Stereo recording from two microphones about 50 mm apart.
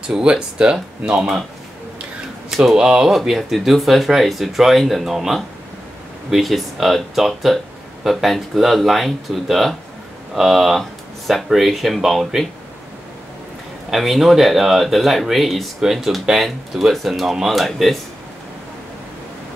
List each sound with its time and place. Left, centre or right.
0.1 s speech: centre
2.5 s speech: centre
2.8 s speech: centre
3.1 s speech: centre
13.9 s speech: centre